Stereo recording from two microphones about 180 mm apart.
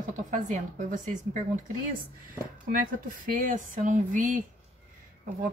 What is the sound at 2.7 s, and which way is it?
Speech, 50° right (ahead or behind).